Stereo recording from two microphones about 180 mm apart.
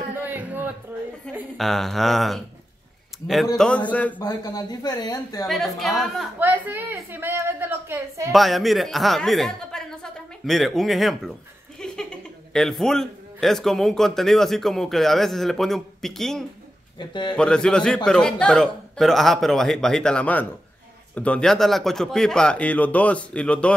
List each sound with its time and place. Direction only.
0.3 s a sound: 10° right (ahead or behind)
1.6 s speech: centre (ahead or behind)
3.5 s speech: 5° left (ahead or behind)
4.2 s speech: 20° left (ahead or behind)
5.5 s speech: centre (ahead or behind)
6.4 s a woman's voice: 10° right (ahead or behind)
8.3 s a man's voice: centre (ahead or behind)
17.0 s speech: 25° left (ahead or behind)
17.4 s speech: 5° left (ahead or behind)